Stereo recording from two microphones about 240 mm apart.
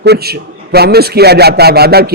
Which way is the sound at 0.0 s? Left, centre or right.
Right.